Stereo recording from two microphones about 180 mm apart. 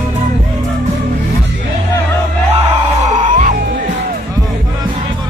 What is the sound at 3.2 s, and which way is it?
Music, 40° right (ahead or behind).